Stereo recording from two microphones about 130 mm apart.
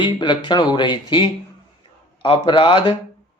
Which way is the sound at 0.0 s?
35° left (ahead or behind).